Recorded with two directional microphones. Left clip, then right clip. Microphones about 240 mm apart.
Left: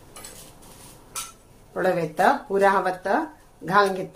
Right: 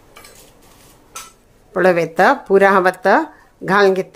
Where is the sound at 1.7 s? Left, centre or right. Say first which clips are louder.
Right 9 dB; right.